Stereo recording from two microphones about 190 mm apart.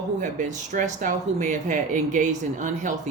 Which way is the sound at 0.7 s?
40° right (ahead or behind).